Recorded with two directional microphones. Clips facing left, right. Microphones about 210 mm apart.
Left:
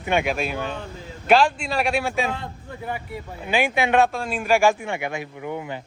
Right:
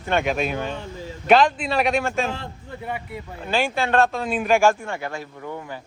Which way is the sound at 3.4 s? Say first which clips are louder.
Left 1 dB; 15° left (ahead or behind).